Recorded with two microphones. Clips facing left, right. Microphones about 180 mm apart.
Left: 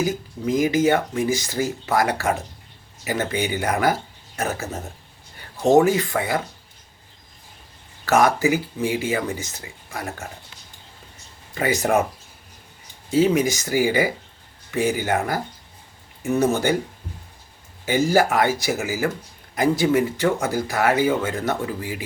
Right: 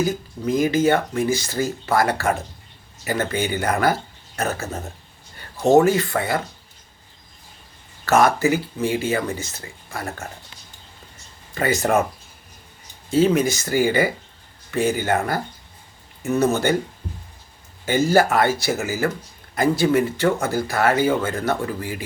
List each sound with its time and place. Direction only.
0.0 s speech: 15° left (ahead or behind)
8.0 s speech: 15° left (ahead or behind)
11.5 s speech: 15° left (ahead or behind)
13.1 s speech: 15° left (ahead or behind)
17.8 s speech: 15° left (ahead or behind)